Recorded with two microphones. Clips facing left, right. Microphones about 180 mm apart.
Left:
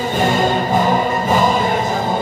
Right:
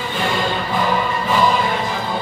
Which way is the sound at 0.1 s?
45° left (ahead or behind).